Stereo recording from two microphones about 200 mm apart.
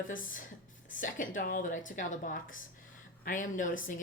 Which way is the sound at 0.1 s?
40° left (ahead or behind).